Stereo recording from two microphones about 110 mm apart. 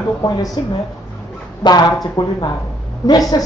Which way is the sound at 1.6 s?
35° left (ahead or behind).